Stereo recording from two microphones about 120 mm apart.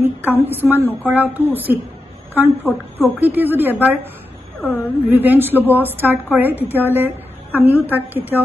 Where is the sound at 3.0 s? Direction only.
15° right (ahead or behind).